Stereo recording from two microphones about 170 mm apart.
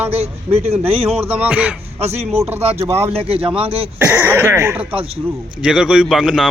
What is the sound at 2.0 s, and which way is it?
Speech, 40° right (ahead or behind).